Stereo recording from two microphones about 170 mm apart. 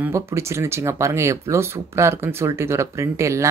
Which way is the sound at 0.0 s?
15° right (ahead or behind).